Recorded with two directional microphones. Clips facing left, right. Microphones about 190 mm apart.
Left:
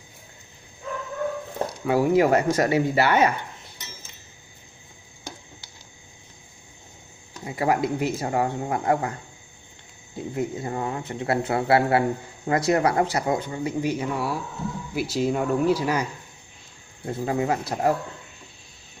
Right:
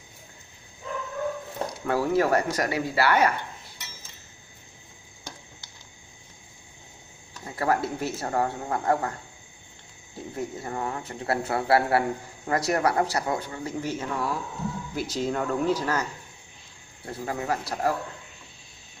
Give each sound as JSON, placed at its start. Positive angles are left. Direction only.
{"t": 1.9, "sound": "speech", "side_deg": 15}
{"t": 7.4, "sound": "speech", "side_deg": 15}
{"t": 10.1, "sound": "speech", "side_deg": 20}